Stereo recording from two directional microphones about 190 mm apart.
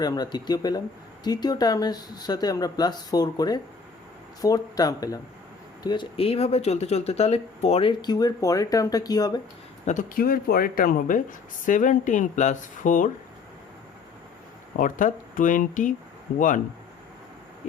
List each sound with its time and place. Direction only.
0.0 s speech: 20° left (ahead or behind)
9.8 s speech: 40° left (ahead or behind)
14.8 s speech: 45° left (ahead or behind)